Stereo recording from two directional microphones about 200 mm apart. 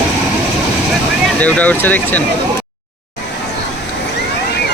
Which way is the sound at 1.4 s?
5° left (ahead or behind).